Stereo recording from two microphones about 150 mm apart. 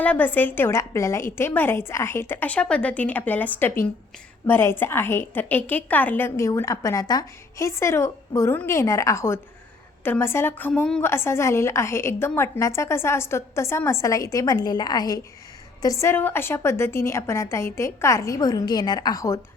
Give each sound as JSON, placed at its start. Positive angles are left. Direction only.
{"t": 0.0, "sound": "a woman's voice", "side_deg": 10}